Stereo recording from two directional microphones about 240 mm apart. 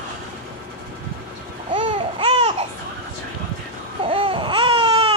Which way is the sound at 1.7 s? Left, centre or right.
Right.